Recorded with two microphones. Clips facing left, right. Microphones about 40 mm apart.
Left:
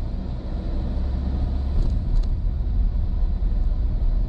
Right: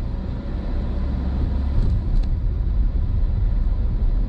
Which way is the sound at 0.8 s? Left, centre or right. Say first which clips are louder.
Right 2 dB; right.